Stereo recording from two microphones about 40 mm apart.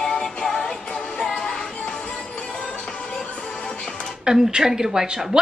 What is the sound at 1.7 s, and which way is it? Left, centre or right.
Music, left.